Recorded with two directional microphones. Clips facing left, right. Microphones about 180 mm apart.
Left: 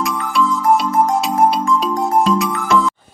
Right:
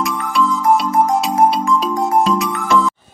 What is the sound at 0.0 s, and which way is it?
Music, centre (ahead or behind).